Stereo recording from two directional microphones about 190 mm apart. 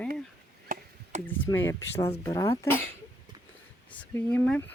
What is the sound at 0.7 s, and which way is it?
Chop, 45° right (ahead or behind).